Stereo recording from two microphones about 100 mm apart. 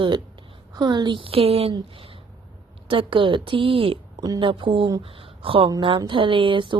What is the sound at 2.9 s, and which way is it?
Speech, 60° right (ahead or behind).